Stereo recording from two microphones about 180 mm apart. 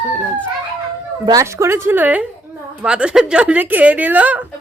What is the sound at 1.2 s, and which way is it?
Speech, 20° right (ahead or behind).